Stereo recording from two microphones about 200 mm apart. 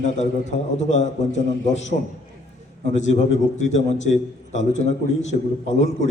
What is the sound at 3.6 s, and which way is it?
A man's voice, 35° left (ahead or behind).